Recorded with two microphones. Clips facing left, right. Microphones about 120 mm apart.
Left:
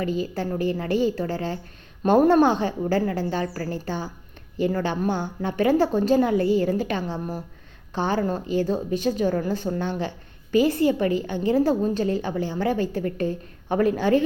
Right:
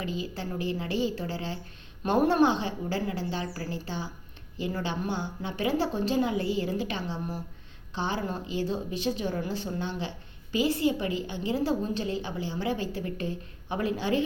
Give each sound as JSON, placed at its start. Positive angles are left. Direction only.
{"t": 0.0, "sound": "a woman's voice", "side_deg": 50}